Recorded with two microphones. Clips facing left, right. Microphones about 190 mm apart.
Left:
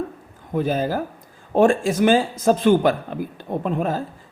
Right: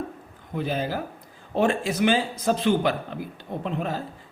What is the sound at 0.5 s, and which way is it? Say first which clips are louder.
Speech: left 6 dB; 45° left (ahead or behind).